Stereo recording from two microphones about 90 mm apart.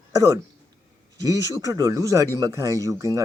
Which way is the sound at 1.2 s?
40° right (ahead or behind).